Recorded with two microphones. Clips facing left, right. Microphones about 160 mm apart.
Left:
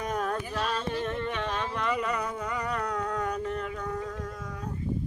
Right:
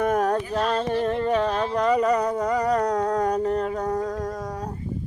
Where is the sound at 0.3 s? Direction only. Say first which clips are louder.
Right 8 dB; 40° right (ahead or behind).